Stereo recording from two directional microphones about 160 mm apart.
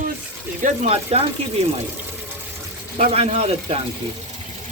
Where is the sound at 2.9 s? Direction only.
45° right (ahead or behind).